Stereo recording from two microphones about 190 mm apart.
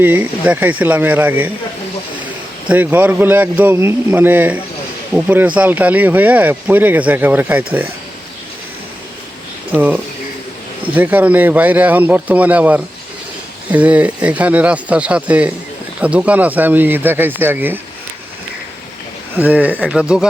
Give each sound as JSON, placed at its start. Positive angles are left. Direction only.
{"t": 0.0, "sound": "speech", "side_deg": -10}
{"t": 2.6, "sound": "speech", "side_deg": -10}
{"t": 9.7, "sound": "speech", "side_deg": -10}
{"t": 19.4, "sound": "speech", "side_deg": -10}